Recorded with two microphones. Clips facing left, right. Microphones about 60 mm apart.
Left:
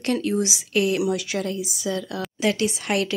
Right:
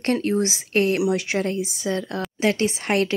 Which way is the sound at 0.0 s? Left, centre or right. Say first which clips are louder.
Right 2 dB; right.